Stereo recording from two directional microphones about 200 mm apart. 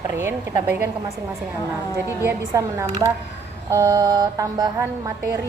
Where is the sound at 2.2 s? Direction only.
10° right (ahead or behind).